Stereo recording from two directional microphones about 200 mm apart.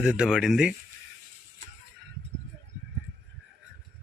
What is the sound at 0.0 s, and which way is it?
Speech, 5° right (ahead or behind).